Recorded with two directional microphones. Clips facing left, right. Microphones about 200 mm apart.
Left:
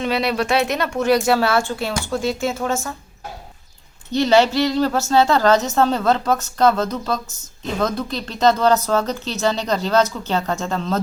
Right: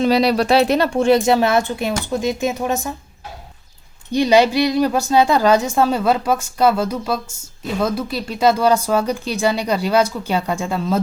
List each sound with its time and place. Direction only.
0.0 s speech: 35° right (ahead or behind); by 2.9 s 15° right (ahead or behind)
4.1 s a woman's voice: 15° right (ahead or behind)